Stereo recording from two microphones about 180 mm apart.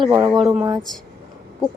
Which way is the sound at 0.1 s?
20° right (ahead or behind).